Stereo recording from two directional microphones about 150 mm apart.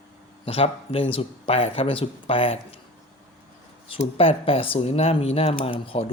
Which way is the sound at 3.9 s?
40° left (ahead or behind).